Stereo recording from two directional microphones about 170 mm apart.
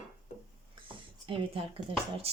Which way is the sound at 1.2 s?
30° right (ahead or behind).